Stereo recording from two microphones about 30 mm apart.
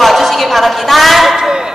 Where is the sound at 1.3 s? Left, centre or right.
Centre.